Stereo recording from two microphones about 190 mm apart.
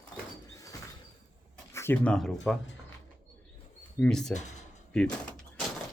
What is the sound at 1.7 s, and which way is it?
Speech, 10° left (ahead or behind).